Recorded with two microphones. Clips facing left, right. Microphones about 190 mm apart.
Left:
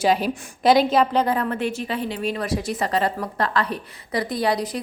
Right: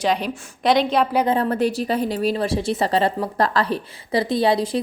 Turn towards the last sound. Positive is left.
turn(degrees=-25)  # may be behind; listen again after turning